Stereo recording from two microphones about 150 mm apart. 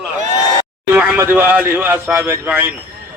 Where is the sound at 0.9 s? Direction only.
10° right (ahead or behind).